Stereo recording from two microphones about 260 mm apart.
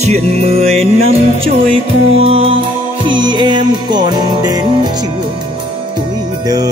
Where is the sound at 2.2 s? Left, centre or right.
Right.